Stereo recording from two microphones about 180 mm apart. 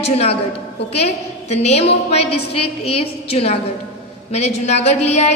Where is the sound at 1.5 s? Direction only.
35° left (ahead or behind).